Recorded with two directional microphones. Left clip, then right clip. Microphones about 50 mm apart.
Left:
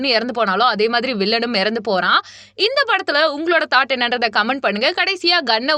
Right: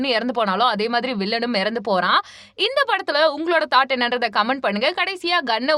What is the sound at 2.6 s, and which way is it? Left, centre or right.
Speech, left.